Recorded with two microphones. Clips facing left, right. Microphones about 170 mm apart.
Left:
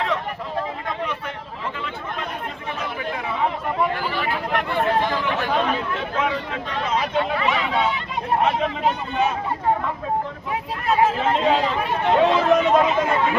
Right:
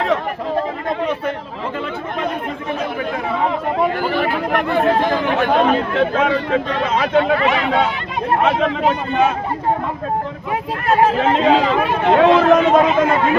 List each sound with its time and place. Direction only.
4.0 s speech: 55° right (ahead or behind); by 9.2 s 90° right
10.5 s speech: 75° right (ahead or behind); by 13.3 s 90° right